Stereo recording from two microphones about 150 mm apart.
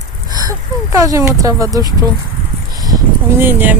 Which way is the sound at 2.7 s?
25° right (ahead or behind).